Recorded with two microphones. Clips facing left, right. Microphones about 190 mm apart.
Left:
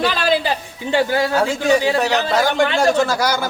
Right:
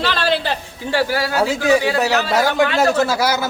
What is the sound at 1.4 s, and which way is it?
A man's voice, 5° right (ahead or behind).